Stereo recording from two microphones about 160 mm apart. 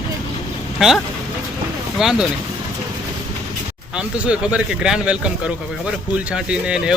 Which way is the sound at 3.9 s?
5° right (ahead or behind).